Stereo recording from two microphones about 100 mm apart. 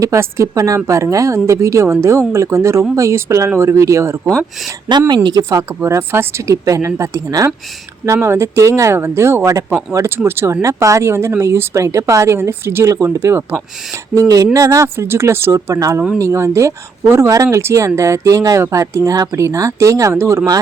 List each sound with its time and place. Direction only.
0.0 s speech: 30° right (ahead or behind)
4.3 s speech: centre (ahead or behind)
4.9 s speech: 45° right (ahead or behind); by 20.6 s 30° right (ahead or behind)